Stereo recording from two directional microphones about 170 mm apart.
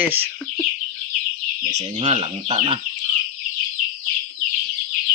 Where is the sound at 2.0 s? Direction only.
30° right (ahead or behind).